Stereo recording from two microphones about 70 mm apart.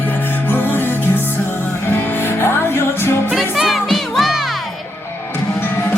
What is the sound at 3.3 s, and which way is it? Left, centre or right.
Music, centre.